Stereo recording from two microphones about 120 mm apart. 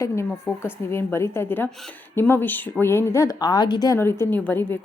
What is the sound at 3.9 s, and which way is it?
Speech, 20° left (ahead or behind).